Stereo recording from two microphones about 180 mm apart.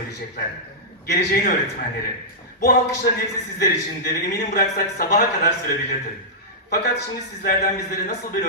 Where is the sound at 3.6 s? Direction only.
55° left (ahead or behind).